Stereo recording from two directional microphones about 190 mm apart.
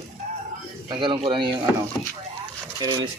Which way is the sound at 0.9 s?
25° right (ahead or behind).